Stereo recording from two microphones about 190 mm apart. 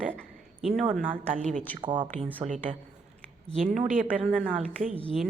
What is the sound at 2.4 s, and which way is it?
Speech, 40° right (ahead or behind).